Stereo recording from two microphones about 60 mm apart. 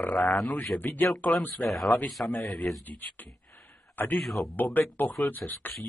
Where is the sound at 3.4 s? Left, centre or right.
Left.